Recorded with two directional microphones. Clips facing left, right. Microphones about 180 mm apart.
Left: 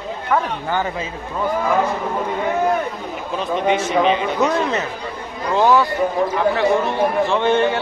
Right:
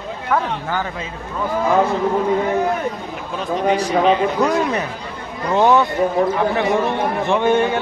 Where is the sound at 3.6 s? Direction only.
40° right (ahead or behind).